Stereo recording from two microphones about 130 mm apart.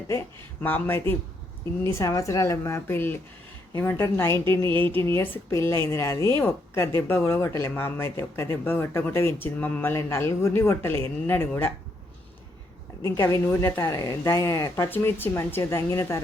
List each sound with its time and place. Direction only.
0.6 s speech: 15° left (ahead or behind)
13.0 s speech: 20° left (ahead or behind)